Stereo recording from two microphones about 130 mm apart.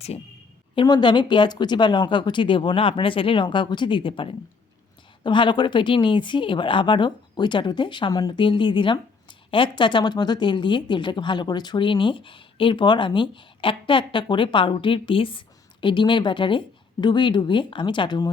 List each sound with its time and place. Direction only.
0.8 s speech: 35° left (ahead or behind)